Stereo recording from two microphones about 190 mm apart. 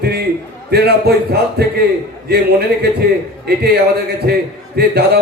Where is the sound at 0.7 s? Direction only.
60° right (ahead or behind).